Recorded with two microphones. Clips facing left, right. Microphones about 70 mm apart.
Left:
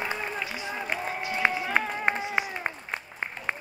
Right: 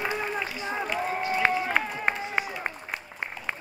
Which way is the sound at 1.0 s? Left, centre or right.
Right.